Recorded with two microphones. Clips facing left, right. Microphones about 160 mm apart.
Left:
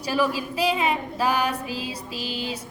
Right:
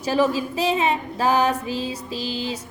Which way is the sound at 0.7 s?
25° right (ahead or behind).